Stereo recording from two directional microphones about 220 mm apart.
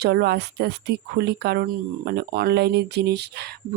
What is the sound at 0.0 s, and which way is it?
Speech, 45° right (ahead or behind).